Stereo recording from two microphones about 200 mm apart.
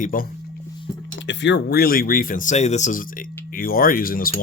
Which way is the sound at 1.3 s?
60° left (ahead or behind).